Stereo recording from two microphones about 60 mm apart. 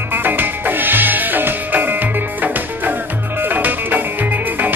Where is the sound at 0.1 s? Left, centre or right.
Right.